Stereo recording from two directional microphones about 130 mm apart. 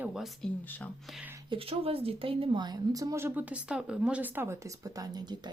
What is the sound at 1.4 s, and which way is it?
A woman's voice, 45° right (ahead or behind).